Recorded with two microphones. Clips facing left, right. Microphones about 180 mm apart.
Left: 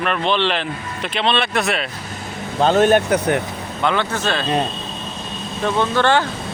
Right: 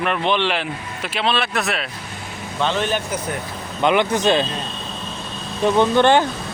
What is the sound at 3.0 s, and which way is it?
Speech, 70° left (ahead or behind).